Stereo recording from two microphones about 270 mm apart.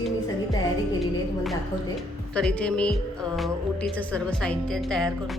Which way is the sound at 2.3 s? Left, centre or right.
Centre.